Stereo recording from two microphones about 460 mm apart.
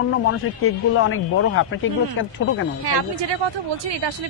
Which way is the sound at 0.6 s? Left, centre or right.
Left.